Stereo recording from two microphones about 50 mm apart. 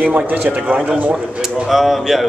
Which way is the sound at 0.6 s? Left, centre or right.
Right.